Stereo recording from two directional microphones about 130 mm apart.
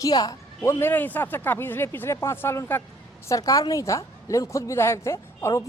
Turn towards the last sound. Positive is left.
turn(degrees=20)  # may be behind; listen again after turning